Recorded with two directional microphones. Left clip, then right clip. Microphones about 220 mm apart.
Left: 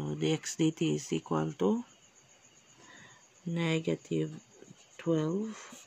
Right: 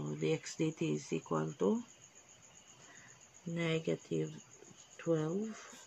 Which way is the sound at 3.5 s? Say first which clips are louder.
Left 4 dB; 50° left (ahead or behind).